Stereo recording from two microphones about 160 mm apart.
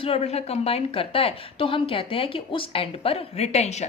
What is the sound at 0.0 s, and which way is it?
A woman's voice, 40° left (ahead or behind).